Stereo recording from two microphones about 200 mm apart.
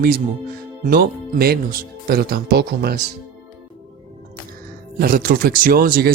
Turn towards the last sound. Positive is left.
turn(degrees=-45)  # may be behind; listen again after turning